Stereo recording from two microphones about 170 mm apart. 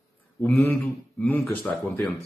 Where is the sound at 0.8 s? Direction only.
5° left (ahead or behind).